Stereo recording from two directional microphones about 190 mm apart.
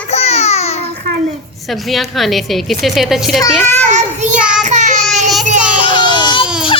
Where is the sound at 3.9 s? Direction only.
40° right (ahead or behind).